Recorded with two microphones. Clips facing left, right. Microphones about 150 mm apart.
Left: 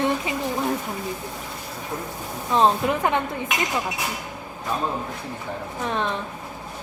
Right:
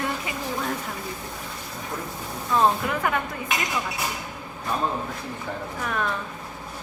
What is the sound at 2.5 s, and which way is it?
Speech, 20° left (ahead or behind).